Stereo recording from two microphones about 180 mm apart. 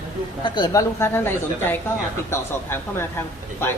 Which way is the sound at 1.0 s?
15° left (ahead or behind).